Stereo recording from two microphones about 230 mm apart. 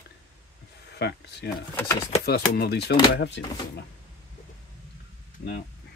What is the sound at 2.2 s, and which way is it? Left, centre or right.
Speech, left.